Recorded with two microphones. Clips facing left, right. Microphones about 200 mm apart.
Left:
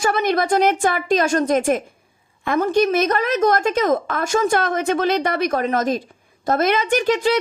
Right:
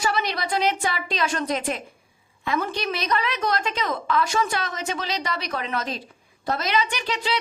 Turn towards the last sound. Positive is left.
turn(degrees=50)  # may be behind; listen again after turning